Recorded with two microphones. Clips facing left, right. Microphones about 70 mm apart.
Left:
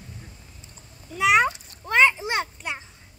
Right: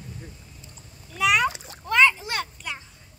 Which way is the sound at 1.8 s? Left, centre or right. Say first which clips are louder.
Even; left.